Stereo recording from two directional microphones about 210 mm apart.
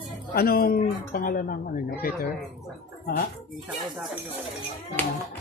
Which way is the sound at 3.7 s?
Centre (ahead or behind).